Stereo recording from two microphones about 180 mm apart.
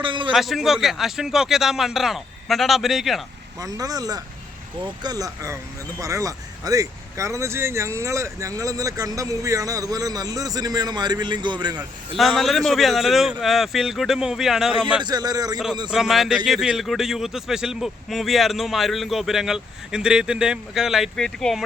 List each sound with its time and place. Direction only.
0.0 s a man's voice: 25° right (ahead or behind)
0.3 s a man's voice: centre (ahead or behind)
3.6 s speech: 20° right (ahead or behind)
12.1 s a man's voice: centre (ahead or behind)
15.0 s speech: 20° right (ahead or behind)
15.9 s a man's voice: centre (ahead or behind)